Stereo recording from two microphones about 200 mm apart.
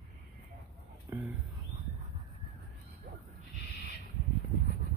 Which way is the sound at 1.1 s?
15° right (ahead or behind).